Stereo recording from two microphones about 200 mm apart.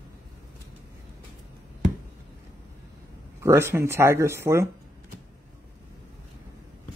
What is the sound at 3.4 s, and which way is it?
Speech, 15° right (ahead or behind).